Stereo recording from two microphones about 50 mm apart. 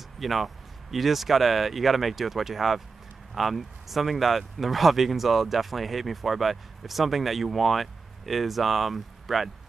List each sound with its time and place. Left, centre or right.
0.2 s speech: centre